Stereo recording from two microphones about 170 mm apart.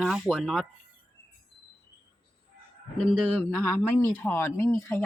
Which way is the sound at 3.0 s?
Centre (ahead or behind).